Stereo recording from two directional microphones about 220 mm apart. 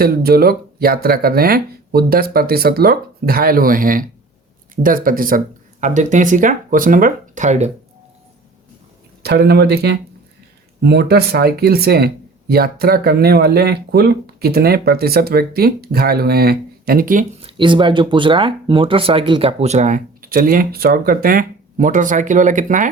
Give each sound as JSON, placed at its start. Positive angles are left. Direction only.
{"t": 0.0, "sound": "speech", "side_deg": -45}
{"t": 9.2, "sound": "speech", "side_deg": -45}
{"t": 17.4, "sound": "speech", "side_deg": -20}